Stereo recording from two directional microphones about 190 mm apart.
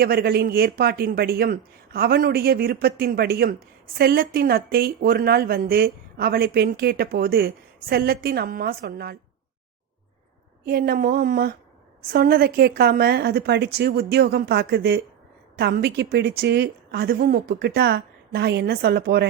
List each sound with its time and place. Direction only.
0.0 s speech: 55° right (ahead or behind)
10.7 s a woman's voice: 50° right (ahead or behind)